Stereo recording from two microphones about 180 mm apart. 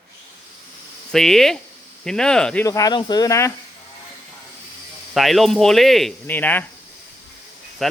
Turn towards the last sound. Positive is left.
turn(degrees=0)  # may be behind; listen again after turning